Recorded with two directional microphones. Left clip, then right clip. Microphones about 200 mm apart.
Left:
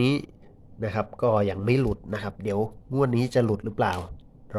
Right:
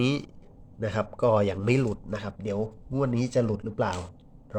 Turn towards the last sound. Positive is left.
turn(degrees=5)  # may be behind; listen again after turning